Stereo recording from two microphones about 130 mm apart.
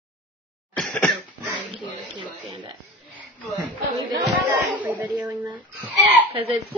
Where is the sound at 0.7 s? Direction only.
5° left (ahead or behind).